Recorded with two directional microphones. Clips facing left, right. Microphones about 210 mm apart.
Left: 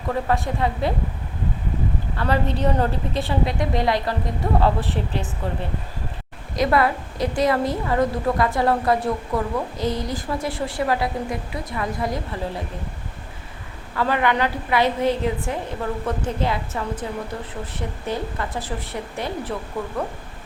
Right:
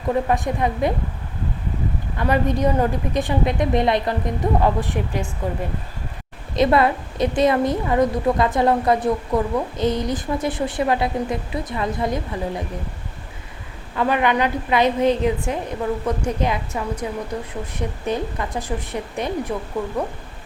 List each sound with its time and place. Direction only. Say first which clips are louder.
0.3 s a woman's voice: right 2 dB; 15° right (ahead or behind)
2.1 s a woman's voice: right 3 dB; 15° right (ahead or behind)
6.6 s a woman's voice: right 3 dB; 25° right (ahead or behind)
13.9 s a woman's voice: right 2 dB; 20° right (ahead or behind)